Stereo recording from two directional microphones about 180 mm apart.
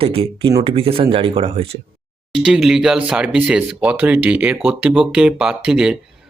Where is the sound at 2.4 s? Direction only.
5° right (ahead or behind).